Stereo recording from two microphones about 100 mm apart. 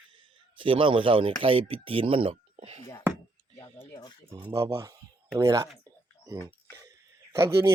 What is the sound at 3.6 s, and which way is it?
Speech, 30° left (ahead or behind).